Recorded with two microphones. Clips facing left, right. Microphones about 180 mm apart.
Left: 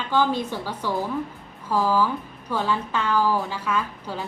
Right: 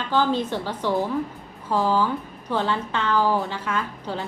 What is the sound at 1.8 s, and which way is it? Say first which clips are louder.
Speech: even; 15° right (ahead or behind).